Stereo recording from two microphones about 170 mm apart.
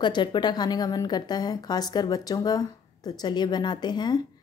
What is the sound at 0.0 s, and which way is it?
A woman's voice, 25° left (ahead or behind).